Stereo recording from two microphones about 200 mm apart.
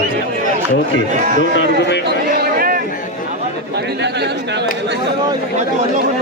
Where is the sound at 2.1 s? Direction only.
50° right (ahead or behind).